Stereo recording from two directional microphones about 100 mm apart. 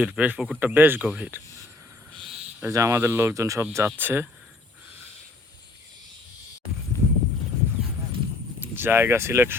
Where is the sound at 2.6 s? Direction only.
30° right (ahead or behind).